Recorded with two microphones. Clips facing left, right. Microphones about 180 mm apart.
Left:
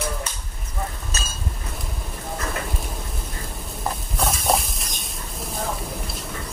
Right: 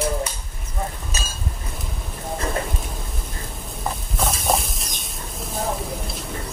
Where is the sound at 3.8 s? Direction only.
Centre (ahead or behind).